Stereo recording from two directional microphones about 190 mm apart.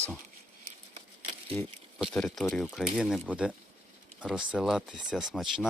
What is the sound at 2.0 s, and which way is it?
Speech, centre (ahead or behind).